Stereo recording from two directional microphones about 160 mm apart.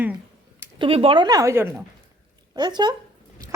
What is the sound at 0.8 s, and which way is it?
A woman's voice, 35° right (ahead or behind).